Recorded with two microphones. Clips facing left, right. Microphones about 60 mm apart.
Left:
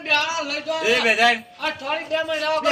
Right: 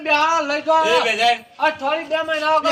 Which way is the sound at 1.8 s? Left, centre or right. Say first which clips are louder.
Right 4 dB; centre.